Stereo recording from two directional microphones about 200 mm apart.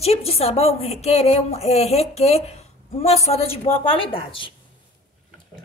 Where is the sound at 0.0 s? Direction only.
30° left (ahead or behind).